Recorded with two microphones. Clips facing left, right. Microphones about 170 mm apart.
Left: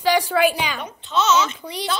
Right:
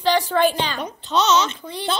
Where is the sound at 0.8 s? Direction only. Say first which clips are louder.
Even; 35° right (ahead or behind).